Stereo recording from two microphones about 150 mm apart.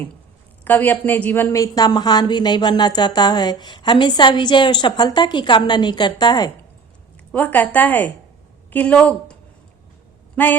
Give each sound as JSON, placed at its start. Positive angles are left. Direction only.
{"t": 0.6, "sound": "a woman's voice", "side_deg": 10}
{"t": 7.3, "sound": "a woman's voice", "side_deg": 10}